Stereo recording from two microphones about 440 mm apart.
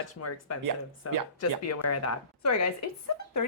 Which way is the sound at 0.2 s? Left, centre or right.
Left.